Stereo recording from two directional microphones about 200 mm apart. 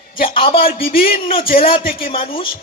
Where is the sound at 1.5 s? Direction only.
45° left (ahead or behind).